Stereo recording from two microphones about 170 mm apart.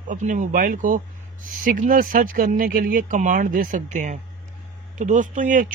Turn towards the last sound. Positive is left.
turn(degrees=-50)  # may be behind; listen again after turning